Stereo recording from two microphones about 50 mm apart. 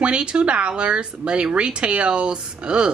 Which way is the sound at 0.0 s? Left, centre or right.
Right.